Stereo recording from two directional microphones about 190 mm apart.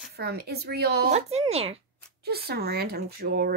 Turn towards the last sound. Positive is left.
turn(degrees=-55)  # may be behind; listen again after turning